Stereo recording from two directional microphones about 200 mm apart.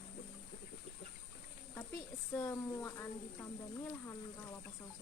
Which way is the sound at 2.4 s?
15° left (ahead or behind).